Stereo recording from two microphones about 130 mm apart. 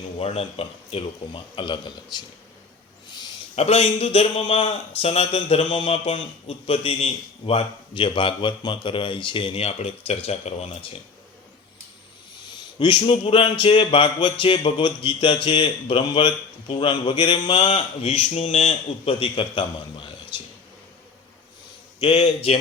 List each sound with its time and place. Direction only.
0.2 s speech: 50° left (ahead or behind)
3.1 s a sound: 30° left (ahead or behind)
3.5 s speech: 55° left (ahead or behind)
12.5 s speech: 40° left (ahead or behind)
17.7 s speech: 50° left (ahead or behind)
22.0 s speech: 45° left (ahead or behind)